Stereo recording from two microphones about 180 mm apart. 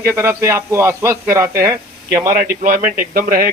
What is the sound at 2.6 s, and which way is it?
Speech, 50° right (ahead or behind).